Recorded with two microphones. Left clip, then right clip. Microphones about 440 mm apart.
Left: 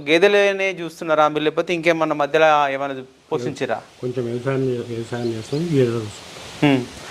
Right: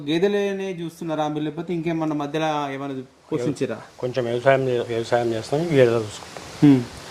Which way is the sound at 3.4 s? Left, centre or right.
Left.